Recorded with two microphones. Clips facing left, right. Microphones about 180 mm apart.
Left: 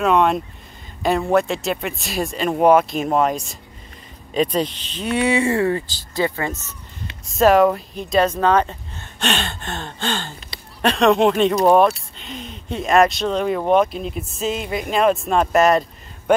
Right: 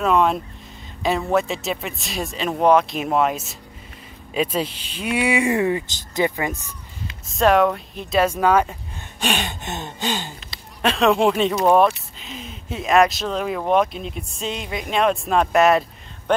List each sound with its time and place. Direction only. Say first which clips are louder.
0.0 s speech: left 2 dB; centre (ahead or behind); by 6.7 s 15° right (ahead or behind)
7.2 s speech: left 3 dB; centre (ahead or behind)
10.8 s speech: left 2 dB; centre (ahead or behind)